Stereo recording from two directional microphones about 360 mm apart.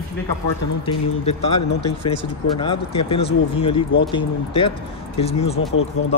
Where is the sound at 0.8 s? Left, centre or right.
Centre.